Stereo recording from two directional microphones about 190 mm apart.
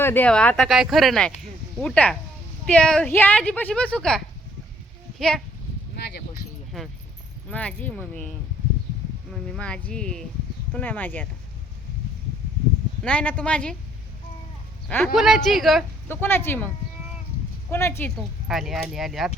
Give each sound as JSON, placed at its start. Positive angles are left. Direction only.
{"t": 0.0, "sound": "a woman's voice", "side_deg": 10}
{"t": 6.0, "sound": "speech", "side_deg": 60}
{"t": 6.7, "sound": "a woman's voice", "side_deg": 0}
{"t": 13.0, "sound": "speech", "side_deg": 5}
{"t": 14.8, "sound": "speech", "side_deg": 10}
{"t": 15.1, "sound": "speech", "side_deg": 0}
{"t": 16.0, "sound": "a woman's voice", "side_deg": 10}
{"t": 17.7, "sound": "a woman's voice", "side_deg": 15}
{"t": 18.4, "sound": "speech", "side_deg": 0}